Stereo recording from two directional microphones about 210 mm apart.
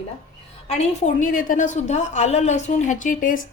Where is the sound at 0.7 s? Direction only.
30° left (ahead or behind).